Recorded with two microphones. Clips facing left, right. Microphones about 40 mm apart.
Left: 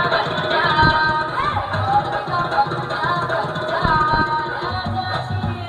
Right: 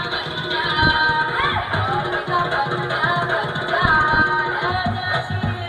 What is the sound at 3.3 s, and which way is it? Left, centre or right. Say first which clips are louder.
Music: even; right.